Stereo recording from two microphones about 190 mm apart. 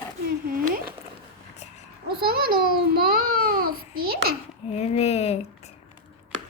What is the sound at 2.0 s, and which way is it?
A child's voice, 55° right (ahead or behind).